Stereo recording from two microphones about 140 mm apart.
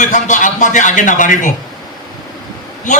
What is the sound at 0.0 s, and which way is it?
A man's voice, 65° left (ahead or behind).